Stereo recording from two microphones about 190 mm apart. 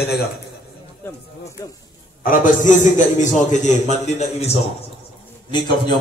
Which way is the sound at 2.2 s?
45° left (ahead or behind).